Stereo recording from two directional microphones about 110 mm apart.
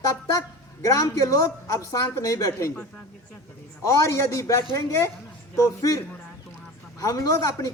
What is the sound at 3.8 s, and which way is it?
A man's voice, 30° left (ahead or behind).